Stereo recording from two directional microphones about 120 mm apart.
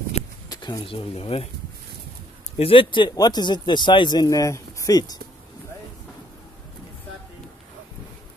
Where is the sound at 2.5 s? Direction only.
50° left (ahead or behind).